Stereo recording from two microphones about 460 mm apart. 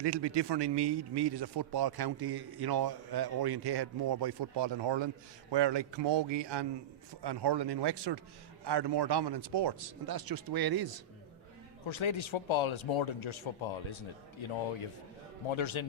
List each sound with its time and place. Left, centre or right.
0.0 s a man's voice: right
11.9 s speech: left
15.4 s speech: left